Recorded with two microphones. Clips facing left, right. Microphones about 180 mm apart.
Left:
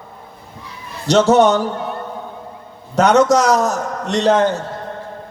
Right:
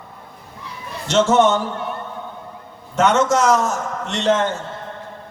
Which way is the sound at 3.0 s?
35° left (ahead or behind).